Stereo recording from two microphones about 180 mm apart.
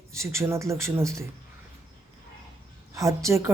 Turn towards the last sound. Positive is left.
turn(degrees=-15)  # may be behind; listen again after turning